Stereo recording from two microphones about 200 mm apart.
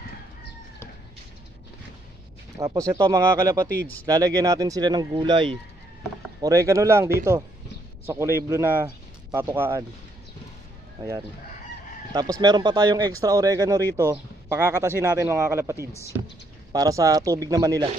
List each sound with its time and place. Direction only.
2.6 s speech: 15° right (ahead or behind)
12.1 s speech: 20° right (ahead or behind)